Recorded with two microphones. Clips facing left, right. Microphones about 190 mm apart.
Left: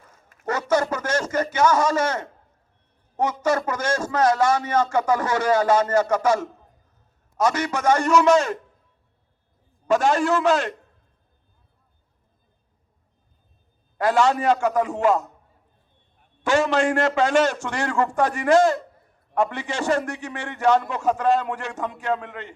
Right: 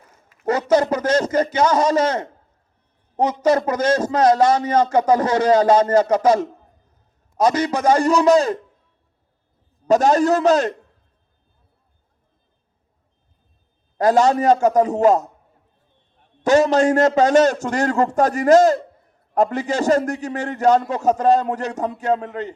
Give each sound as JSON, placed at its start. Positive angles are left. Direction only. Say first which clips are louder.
{"t": 0.4, "sound": "speech", "louder": "right 5 dB", "side_deg": -15}
{"t": 3.4, "sound": "speech", "louder": "right 7 dB", "side_deg": -15}
{"t": 7.4, "sound": "a man's voice", "louder": "right 4 dB", "side_deg": -35}
{"t": 9.8, "sound": "a man's voice", "louder": "right 5 dB", "side_deg": -40}
{"t": 14.0, "sound": "a man's voice", "louder": "right 4 dB", "side_deg": -40}
{"t": 16.4, "sound": "a man's voice", "louder": "right 5 dB", "side_deg": -40}